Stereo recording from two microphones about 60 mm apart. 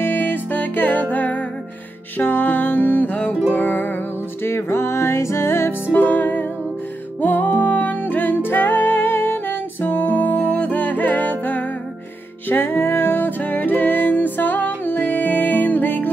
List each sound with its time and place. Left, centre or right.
0.0 s music: left
12.4 s music: left